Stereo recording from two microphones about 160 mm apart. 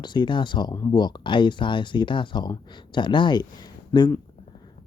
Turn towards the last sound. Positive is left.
turn(degrees=25)  # may be behind; listen again after turning